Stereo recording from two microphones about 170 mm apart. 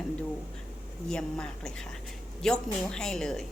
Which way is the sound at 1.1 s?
5° left (ahead or behind).